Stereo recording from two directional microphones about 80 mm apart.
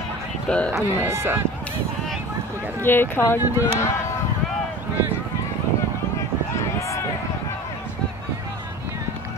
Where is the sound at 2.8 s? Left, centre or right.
Left.